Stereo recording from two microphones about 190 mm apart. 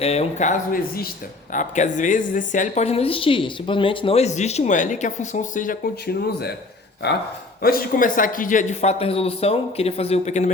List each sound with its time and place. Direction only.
0.0 s a woman's voice: 35° left (ahead or behind); by 6.5 s 55° left (ahead or behind)
7.6 s a woman's voice: 50° left (ahead or behind)